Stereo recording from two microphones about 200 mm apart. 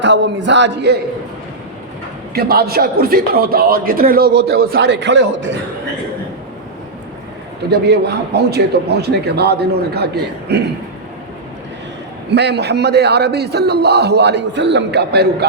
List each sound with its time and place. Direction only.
0.0 s a man's voice: 60° right (ahead or behind)
2.3 s speech: 50° right (ahead or behind)
7.7 s a man's voice: 55° right (ahead or behind)
12.3 s a man's voice: 55° right (ahead or behind)